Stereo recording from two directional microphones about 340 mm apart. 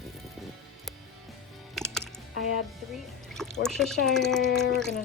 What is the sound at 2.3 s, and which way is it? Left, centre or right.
Speech, right.